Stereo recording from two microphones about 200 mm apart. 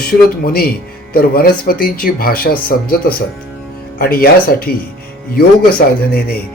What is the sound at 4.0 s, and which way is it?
Speech, 50° left (ahead or behind).